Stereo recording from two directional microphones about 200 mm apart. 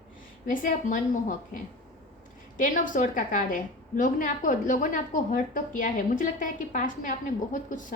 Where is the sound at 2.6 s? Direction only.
40° left (ahead or behind).